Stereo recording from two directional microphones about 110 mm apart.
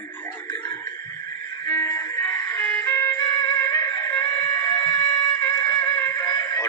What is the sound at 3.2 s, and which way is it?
Music, 35° left (ahead or behind).